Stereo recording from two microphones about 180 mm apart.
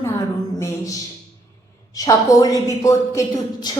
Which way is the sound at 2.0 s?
20° left (ahead or behind).